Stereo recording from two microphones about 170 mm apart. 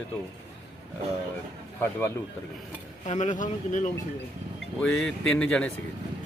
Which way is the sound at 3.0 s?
45° left (ahead or behind).